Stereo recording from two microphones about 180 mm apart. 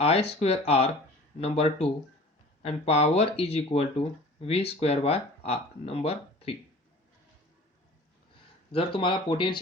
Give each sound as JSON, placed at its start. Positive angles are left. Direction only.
{"t": 0.0, "sound": "speech", "side_deg": 35}
{"t": 8.7, "sound": "speech", "side_deg": 30}